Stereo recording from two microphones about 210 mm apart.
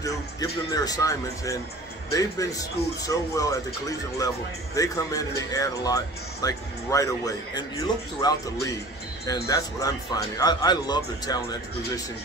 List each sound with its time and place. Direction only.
0.0 s speech: 15° left (ahead or behind)
4.7 s speech: 15° left (ahead or behind)
9.5 s speech: 15° left (ahead or behind)